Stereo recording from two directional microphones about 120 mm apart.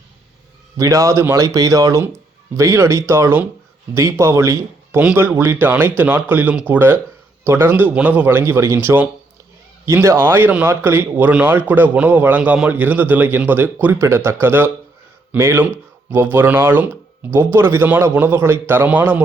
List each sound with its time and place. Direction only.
0.8 s a man's voice: 25° right (ahead or behind)